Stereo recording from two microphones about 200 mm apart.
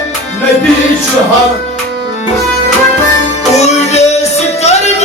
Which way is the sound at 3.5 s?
35° left (ahead or behind).